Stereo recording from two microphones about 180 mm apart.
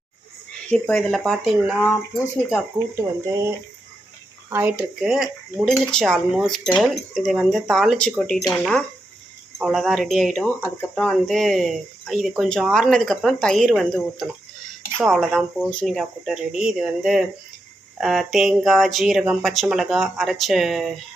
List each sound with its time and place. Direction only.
0.7 s speech: 5° left (ahead or behind)
2.9 s speech: 15° right (ahead or behind)
4.4 s speech: 10° right (ahead or behind)